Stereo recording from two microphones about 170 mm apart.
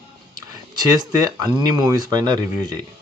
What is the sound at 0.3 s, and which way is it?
Speech, 25° right (ahead or behind).